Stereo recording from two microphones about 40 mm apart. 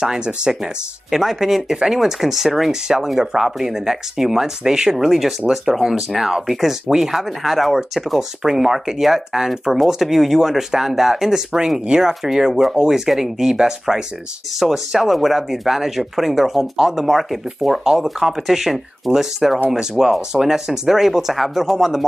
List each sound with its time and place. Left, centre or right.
0.0 s speech: centre
1.1 s speech: centre
7.2 s speech: centre